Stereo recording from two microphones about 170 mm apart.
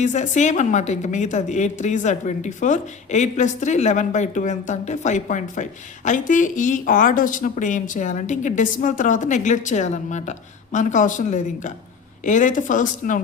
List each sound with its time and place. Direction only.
0.0 s speech: 45° left (ahead or behind)